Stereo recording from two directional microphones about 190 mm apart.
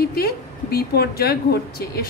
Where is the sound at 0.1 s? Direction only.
55° left (ahead or behind).